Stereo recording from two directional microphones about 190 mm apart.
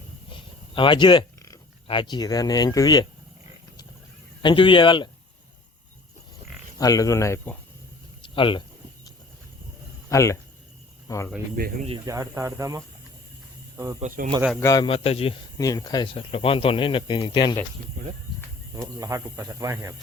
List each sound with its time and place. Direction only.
0.3 s speech: 25° left (ahead or behind)
4.4 s speech: 25° left (ahead or behind)
6.7 s speech: 20° left (ahead or behind)
8.2 s speech: 25° left (ahead or behind)
10.1 s speech: 15° left (ahead or behind)
11.6 s speech: 50° right (ahead or behind)
12.0 s speech: 15° right (ahead or behind)
14.6 s speech: 20° left (ahead or behind)
15.5 s speech: 20° left (ahead or behind)
18.8 s speech: 15° right (ahead or behind)